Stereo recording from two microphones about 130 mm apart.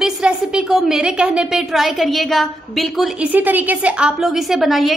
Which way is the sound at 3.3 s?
15° right (ahead or behind).